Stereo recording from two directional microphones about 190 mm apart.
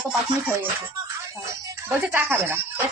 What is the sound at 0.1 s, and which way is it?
A woman's voice, 10° right (ahead or behind).